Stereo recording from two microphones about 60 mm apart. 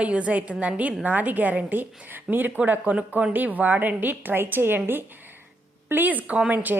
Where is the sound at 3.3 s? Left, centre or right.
Right.